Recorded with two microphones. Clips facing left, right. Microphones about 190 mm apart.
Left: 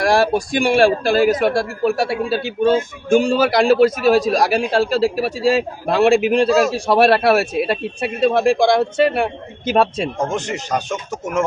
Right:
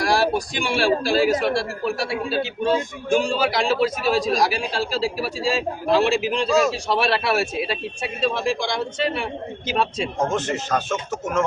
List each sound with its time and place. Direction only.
0.0 s a man's voice: 50° left (ahead or behind)
6.5 s a man's voice: centre (ahead or behind)
6.7 s speech: 55° left (ahead or behind)
10.3 s speech: 15° left (ahead or behind)